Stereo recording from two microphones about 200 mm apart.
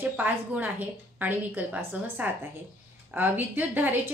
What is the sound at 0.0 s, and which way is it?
A woman's voice, 10° right (ahead or behind).